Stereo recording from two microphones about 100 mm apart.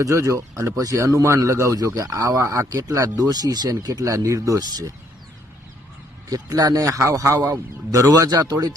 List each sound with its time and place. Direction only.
0.0 s a man's voice: 30° right (ahead or behind)
6.3 s a man's voice: 40° right (ahead or behind)